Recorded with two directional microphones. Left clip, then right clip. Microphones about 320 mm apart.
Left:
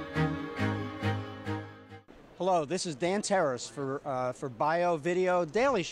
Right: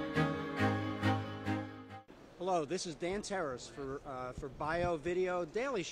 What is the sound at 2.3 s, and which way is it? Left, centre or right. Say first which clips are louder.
Speech: left 7 dB; left.